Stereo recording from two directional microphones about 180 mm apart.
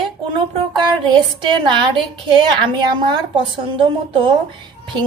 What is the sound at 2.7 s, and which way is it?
A woman's voice, 25° right (ahead or behind).